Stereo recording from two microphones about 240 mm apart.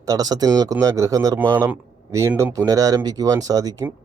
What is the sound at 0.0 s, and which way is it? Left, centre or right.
Speech, centre.